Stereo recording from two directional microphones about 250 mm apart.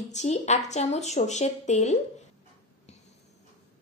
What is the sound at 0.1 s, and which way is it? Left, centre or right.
A woman's voice, left.